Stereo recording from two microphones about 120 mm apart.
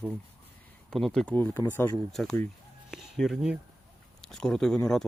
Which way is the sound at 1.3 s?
20° left (ahead or behind).